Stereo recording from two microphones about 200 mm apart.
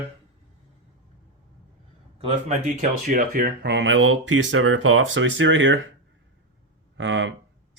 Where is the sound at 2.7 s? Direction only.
40° right (ahead or behind); by 5.8 s 70° right (ahead or behind).